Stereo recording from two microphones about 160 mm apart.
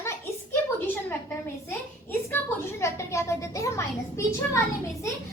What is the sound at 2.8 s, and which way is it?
A child's voice, 20° left (ahead or behind).